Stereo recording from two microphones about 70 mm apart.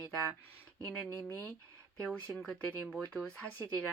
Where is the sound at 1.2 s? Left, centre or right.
Left.